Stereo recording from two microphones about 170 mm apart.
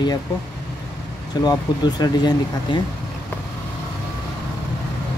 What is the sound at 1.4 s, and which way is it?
Speech, 25° left (ahead or behind).